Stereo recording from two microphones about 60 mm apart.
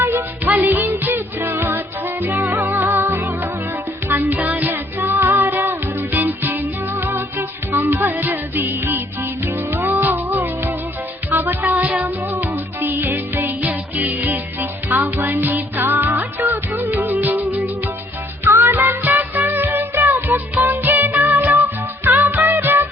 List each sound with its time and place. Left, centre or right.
0.0 s music: right